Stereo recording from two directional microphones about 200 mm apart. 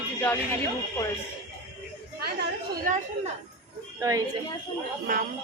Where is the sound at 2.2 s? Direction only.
50° right (ahead or behind).